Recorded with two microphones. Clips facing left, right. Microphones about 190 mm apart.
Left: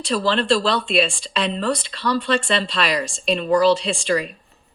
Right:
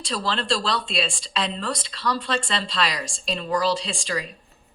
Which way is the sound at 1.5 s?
60° left (ahead or behind).